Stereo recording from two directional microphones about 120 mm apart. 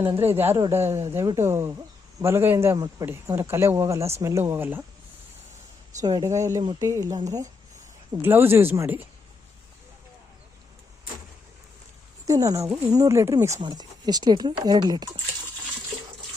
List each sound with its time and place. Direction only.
0.0 s speech: 45° right (ahead or behind)
0.3 s speech: 20° right (ahead or behind)
2.7 s speech: 35° right (ahead or behind)
3.1 s speech: 20° right (ahead or behind)
6.0 s speech: 30° right (ahead or behind)
8.2 s speech: 20° right (ahead or behind)
12.2 s speech: 30° right (ahead or behind)
13.6 s speech: 35° right (ahead or behind)